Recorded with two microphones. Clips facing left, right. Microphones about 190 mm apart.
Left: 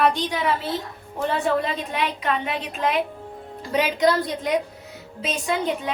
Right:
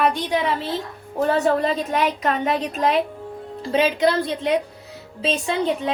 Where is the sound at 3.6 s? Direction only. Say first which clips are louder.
Right 2 dB; 25° right (ahead or behind).